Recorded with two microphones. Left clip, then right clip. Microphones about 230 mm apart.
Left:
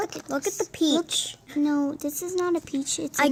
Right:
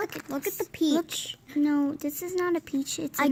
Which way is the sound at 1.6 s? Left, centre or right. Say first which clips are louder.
Left 1 dB; right.